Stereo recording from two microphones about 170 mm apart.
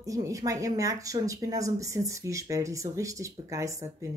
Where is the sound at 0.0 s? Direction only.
20° right (ahead or behind).